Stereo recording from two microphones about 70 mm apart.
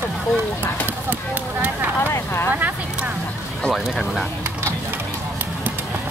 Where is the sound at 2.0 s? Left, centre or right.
Left.